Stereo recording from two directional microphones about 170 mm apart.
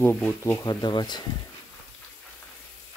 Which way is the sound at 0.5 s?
25° left (ahead or behind).